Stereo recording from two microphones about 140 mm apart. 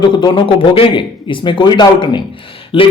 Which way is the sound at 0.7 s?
40° left (ahead or behind).